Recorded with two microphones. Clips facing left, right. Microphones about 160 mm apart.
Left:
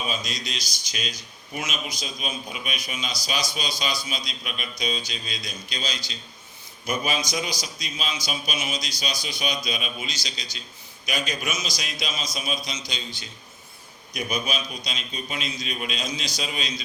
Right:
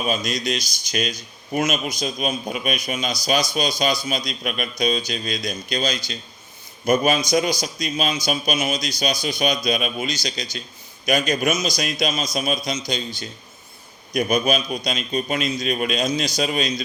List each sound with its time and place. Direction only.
0.1 s a man's voice: 50° right (ahead or behind)
14.1 s a man's voice: 50° right (ahead or behind)